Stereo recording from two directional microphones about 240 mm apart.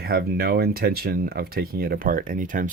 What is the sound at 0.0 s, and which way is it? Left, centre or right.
Speech, right.